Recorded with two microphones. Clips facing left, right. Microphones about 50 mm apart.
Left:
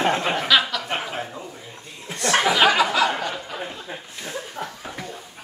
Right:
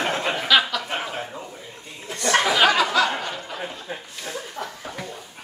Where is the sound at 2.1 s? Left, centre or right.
Centre.